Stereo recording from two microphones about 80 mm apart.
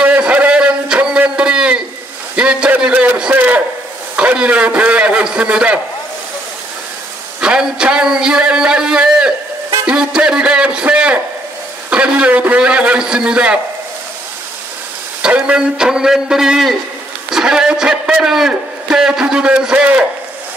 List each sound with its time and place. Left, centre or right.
0.0 s a sound: centre
2.3 s a man's voice: centre
7.3 s a man's voice: centre
15.2 s a man's voice: centre